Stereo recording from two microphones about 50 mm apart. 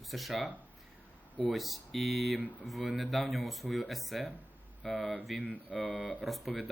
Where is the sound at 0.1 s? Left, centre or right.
Centre.